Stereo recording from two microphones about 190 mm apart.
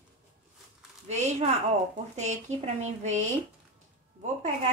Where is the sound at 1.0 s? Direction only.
35° right (ahead or behind).